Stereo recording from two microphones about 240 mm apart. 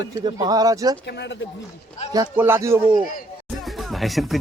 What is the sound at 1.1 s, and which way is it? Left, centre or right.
Speech, left.